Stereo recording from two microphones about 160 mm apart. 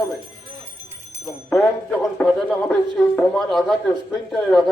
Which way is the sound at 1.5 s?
5° left (ahead or behind).